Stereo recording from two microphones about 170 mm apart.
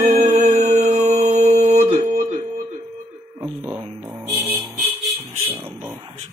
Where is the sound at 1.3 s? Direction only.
45° right (ahead or behind).